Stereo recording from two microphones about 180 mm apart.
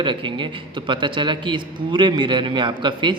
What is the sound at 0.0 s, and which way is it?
A man's voice, 25° right (ahead or behind).